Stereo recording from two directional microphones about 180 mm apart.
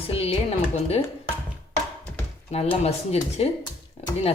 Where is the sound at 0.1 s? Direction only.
35° left (ahead or behind).